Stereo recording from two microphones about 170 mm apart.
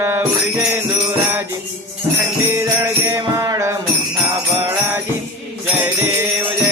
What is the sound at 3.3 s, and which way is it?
Music, 15° right (ahead or behind).